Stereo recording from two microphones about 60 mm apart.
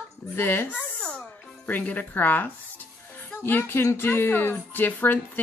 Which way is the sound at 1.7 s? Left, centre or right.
Left.